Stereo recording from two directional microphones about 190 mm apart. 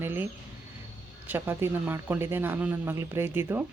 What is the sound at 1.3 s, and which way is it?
Speech, 10° right (ahead or behind).